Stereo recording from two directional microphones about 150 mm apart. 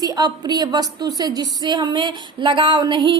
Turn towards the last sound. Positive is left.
turn(degrees=-30)  # may be behind; listen again after turning